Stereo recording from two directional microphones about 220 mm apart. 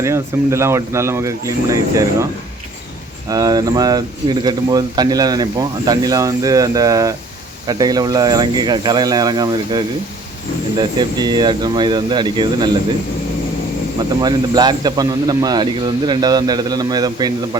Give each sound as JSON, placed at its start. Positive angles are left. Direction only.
{"t": 0.0, "sound": "speech", "side_deg": -10}
{"t": 3.2, "sound": "speech", "side_deg": -15}
{"t": 14.2, "sound": "speech", "side_deg": -20}